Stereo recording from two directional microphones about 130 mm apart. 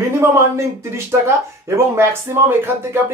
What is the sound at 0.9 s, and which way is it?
Speech, 20° right (ahead or behind).